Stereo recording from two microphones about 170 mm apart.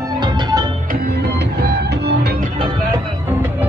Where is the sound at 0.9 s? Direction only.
75° right (ahead or behind).